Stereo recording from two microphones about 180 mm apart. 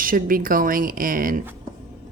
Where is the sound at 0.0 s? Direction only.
50° right (ahead or behind).